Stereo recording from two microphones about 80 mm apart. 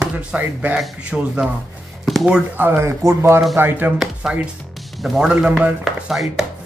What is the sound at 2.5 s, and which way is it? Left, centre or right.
Speech, right.